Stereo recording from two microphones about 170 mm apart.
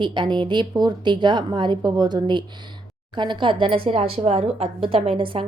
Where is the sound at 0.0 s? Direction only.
25° right (ahead or behind).